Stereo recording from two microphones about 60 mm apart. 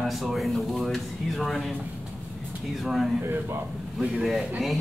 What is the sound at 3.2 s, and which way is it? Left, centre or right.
Speech, right.